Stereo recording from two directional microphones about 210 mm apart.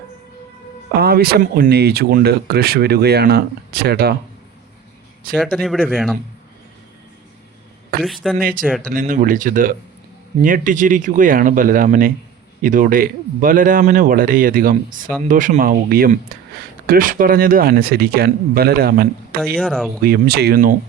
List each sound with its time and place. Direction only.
0.9 s speech: 50° right (ahead or behind)
5.4 s speech: centre (ahead or behind)
8.0 s speech: centre (ahead or behind)
8.4 s speech: 40° right (ahead or behind)
19.5 s speech: centre (ahead or behind)
20.0 s speech: 45° right (ahead or behind)